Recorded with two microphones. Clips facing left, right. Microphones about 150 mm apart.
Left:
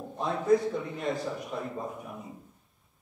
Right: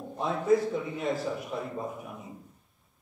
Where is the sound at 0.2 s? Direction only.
Centre (ahead or behind).